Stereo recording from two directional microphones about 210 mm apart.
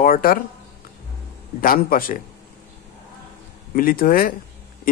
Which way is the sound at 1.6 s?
40° left (ahead or behind).